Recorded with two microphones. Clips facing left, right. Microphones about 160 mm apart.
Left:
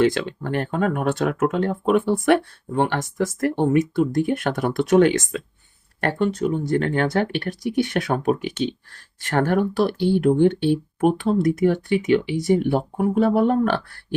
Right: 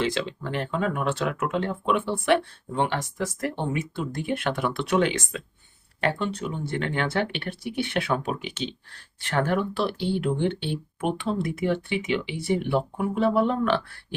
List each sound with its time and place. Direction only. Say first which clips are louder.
0.0 s speech: left 7 dB; 50° left (ahead or behind)